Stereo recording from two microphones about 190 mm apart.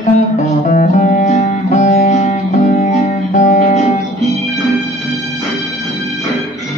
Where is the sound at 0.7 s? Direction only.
40° left (ahead or behind).